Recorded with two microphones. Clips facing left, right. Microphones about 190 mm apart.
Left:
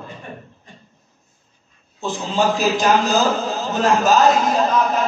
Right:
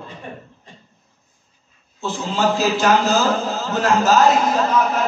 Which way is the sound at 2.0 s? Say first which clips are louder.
Left 1 dB; 15° left (ahead or behind).